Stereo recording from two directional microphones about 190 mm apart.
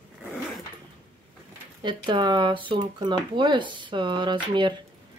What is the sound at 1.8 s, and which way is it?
Speech, 25° right (ahead or behind).